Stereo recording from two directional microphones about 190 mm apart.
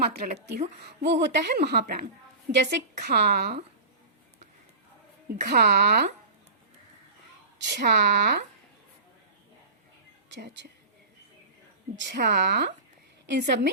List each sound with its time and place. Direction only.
0.3 s a woman's voice: 60° right (ahead or behind)
5.4 s a woman's voice: 60° right (ahead or behind)
7.7 s a woman's voice: 60° right (ahead or behind)
10.4 s a woman's voice: 65° right (ahead or behind)
11.9 s a woman's voice: 55° right (ahead or behind)